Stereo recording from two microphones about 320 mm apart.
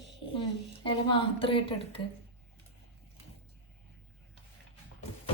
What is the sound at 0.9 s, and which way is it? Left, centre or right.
Speech, centre.